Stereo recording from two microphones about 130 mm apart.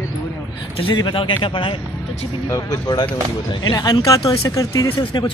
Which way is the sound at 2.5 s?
30° left (ahead or behind).